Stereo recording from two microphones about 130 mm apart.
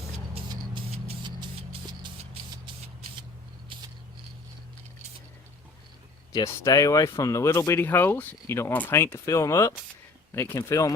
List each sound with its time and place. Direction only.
1.2 s music: 35° right (ahead or behind)
6.3 s speech: 25° left (ahead or behind)